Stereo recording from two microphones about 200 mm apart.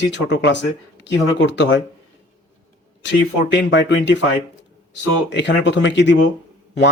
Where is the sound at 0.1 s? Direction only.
60° left (ahead or behind).